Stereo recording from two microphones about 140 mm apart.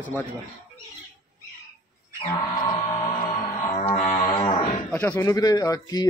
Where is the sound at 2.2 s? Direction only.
30° left (ahead or behind).